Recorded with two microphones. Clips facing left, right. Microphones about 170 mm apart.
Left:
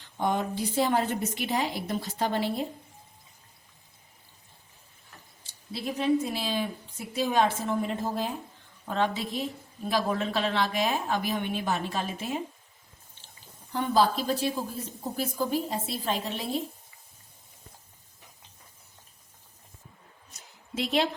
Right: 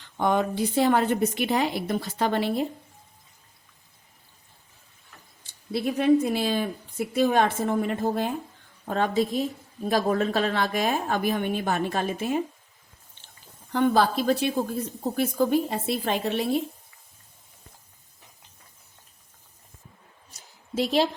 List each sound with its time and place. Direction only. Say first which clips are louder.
0.2 s a woman's voice: right 4 dB; 65° right (ahead or behind)
5.4 s a woman's voice: right 8 dB; 55° right (ahead or behind)
8.9 s a woman's voice: right 4 dB; 45° right (ahead or behind)
13.7 s a woman's voice: right 3 dB; 65° right (ahead or behind)
20.7 s a woman's voice: right 4 dB; 35° right (ahead or behind)